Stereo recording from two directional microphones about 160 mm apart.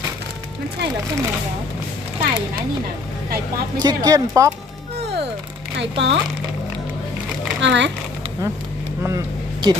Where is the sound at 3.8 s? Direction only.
25° right (ahead or behind).